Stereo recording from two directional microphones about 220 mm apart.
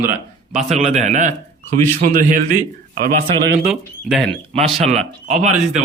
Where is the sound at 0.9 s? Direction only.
30° right (ahead or behind).